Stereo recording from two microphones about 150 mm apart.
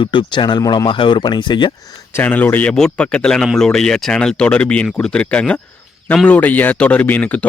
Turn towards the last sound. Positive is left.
turn(degrees=10)  # may be behind; listen again after turning